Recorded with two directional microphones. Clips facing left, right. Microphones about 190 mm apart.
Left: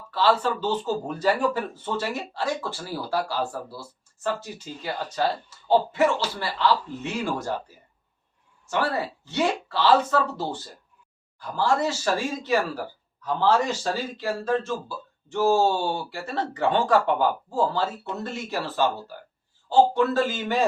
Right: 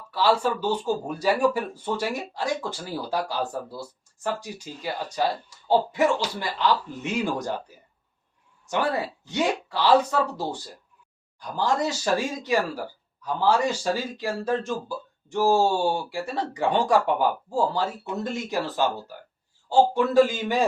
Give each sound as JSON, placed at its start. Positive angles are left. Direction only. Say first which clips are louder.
{"t": 0.1, "sound": "speech", "louder": "even", "side_deg": -10}
{"t": 8.6, "sound": "speech", "louder": "even", "side_deg": -15}